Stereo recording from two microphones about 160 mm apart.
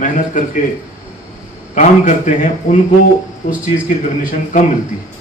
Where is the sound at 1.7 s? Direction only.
55° left (ahead or behind).